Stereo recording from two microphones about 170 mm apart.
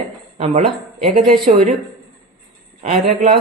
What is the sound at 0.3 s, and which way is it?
A woman's voice, 40° right (ahead or behind).